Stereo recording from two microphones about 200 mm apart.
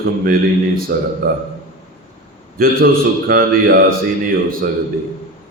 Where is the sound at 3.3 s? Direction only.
50° right (ahead or behind).